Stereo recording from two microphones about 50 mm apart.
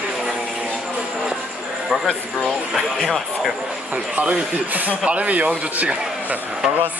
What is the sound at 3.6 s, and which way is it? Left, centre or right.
Speech, centre.